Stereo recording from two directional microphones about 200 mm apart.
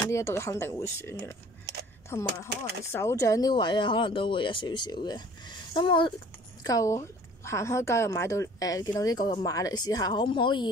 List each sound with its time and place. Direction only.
0.0 s a woman's voice: 15° left (ahead or behind)